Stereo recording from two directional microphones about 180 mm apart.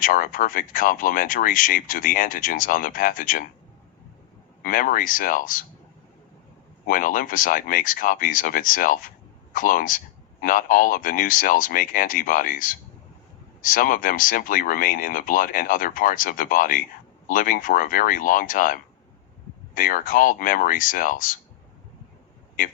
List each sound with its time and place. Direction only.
0.0 s speech: 50° left (ahead or behind)
4.6 s speech: 50° left (ahead or behind)
6.8 s speech: 50° left (ahead or behind)